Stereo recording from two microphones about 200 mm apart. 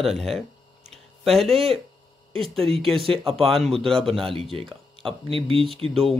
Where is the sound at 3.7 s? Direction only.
5° left (ahead or behind).